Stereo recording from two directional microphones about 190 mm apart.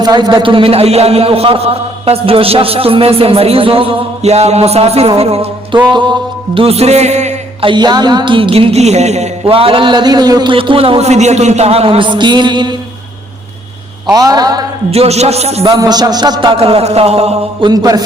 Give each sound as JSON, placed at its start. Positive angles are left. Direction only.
{"t": 0.0, "sound": "a man's voice", "side_deg": -20}
{"t": 5.9, "sound": "music", "side_deg": -25}
{"t": 14.1, "sound": "music", "side_deg": -20}
{"t": 14.8, "sound": "a man's voice", "side_deg": -35}
{"t": 15.7, "sound": "music", "side_deg": -20}
{"t": 17.7, "sound": "music", "side_deg": -20}